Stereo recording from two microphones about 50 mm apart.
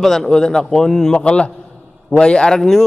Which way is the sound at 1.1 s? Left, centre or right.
Left.